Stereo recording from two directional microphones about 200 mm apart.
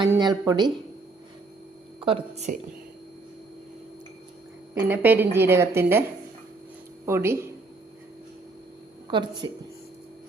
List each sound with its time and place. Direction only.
0.1 s a woman's voice: 20° right (ahead or behind)
2.0 s speech: 30° right (ahead or behind)
4.7 s a woman's voice: 10° right (ahead or behind)
9.0 s a woman's voice: 25° right (ahead or behind)